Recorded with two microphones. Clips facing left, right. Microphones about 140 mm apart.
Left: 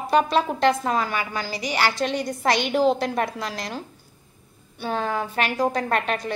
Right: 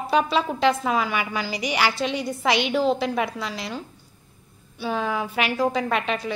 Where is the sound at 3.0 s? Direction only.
45° left (ahead or behind).